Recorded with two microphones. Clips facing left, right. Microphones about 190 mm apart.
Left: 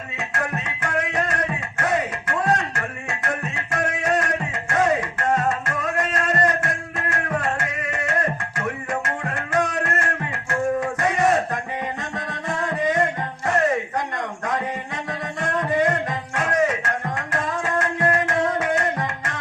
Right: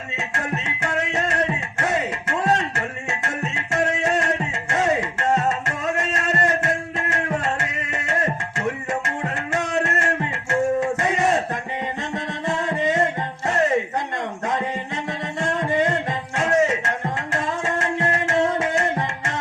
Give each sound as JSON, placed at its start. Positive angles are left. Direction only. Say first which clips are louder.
{"t": 0.3, "sound": "music", "louder": "even", "side_deg": -25}
{"t": 10.5, "sound": "a sound", "louder": "right 2 dB", "side_deg": -25}
{"t": 12.1, "sound": "music", "louder": "right 3 dB", "side_deg": -25}
{"t": 15.4, "sound": "music", "louder": "even", "side_deg": -25}